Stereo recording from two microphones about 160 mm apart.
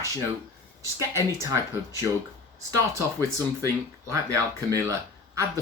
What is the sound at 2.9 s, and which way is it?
Speech, 20° right (ahead or behind).